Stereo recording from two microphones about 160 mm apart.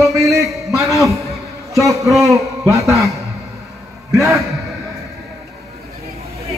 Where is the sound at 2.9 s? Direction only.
Centre (ahead or behind).